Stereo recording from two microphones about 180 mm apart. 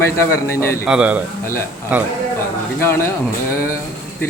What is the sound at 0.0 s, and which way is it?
Speech, 15° left (ahead or behind).